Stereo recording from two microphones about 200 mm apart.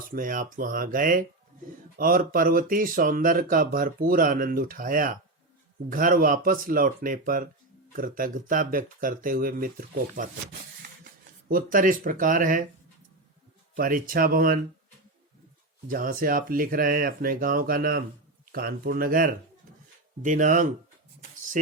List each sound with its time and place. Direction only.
0.1 s speech: 45° right (ahead or behind)
13.7 s speech: 45° right (ahead or behind)
15.9 s speech: 45° right (ahead or behind)